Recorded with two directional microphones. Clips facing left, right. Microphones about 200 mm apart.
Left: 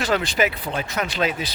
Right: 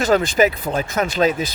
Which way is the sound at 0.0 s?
45° right (ahead or behind).